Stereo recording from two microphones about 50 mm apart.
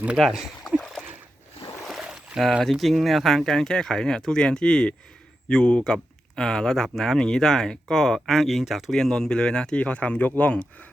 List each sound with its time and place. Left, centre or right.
0.2 s speech: centre
1.9 s boat: centre
2.7 s speech: centre; by 10.5 s left
10.5 s speech: left